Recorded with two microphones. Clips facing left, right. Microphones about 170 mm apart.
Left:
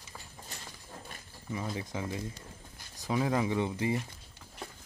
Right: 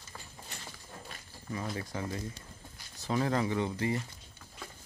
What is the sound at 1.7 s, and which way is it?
Speech, 20° left (ahead or behind).